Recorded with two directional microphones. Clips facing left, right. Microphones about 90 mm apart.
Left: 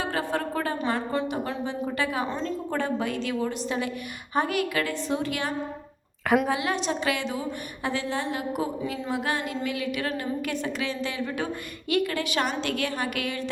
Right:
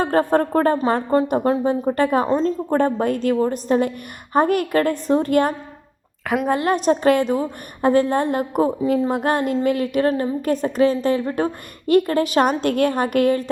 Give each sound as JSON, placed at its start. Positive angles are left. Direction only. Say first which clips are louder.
{"t": 0.0, "sound": "a woman's voice", "louder": "right 10 dB", "side_deg": -45}
{"t": 6.2, "sound": "a woman's voice", "louder": "right 1 dB", "side_deg": 0}
{"t": 6.5, "sound": "a woman's voice", "louder": "right 9 dB", "side_deg": -45}